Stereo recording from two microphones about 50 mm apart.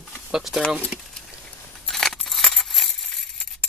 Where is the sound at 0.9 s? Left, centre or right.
Centre.